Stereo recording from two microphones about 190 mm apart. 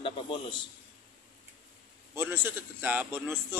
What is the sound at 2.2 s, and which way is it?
A man's voice, 10° right (ahead or behind).